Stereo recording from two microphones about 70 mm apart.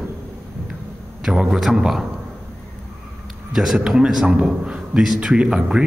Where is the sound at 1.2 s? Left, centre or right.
Centre.